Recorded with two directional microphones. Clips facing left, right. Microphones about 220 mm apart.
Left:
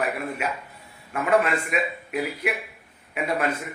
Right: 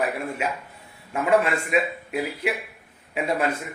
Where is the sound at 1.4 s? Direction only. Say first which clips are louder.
Right 2 dB; 30° right (ahead or behind).